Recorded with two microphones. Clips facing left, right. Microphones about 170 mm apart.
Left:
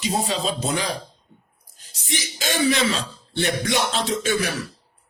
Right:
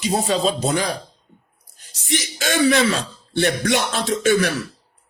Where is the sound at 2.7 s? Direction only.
55° right (ahead or behind).